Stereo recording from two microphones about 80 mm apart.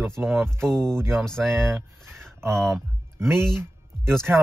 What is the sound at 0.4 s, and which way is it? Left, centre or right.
Speech, right.